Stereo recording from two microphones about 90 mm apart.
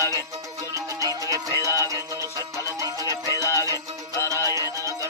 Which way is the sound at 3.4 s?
40° left (ahead or behind).